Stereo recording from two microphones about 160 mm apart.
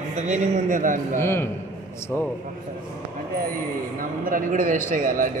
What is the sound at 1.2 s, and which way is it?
Speech, 15° left (ahead or behind).